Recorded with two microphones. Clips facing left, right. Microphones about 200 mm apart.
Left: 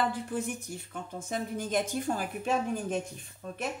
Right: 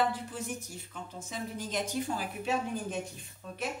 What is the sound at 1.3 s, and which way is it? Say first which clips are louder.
Speech: left 6 dB; 55° left (ahead or behind).